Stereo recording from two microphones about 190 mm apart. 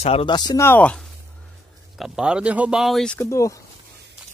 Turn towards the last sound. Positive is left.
turn(degrees=15)  # may be behind; listen again after turning